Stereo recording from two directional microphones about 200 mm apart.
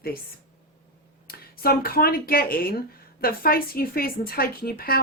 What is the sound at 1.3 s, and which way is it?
Speech, 50° left (ahead or behind).